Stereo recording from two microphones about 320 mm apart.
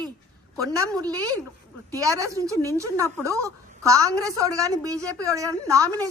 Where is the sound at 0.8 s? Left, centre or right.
Centre.